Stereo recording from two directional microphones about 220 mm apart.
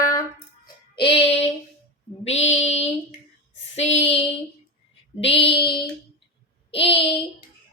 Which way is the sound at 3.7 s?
30° left (ahead or behind).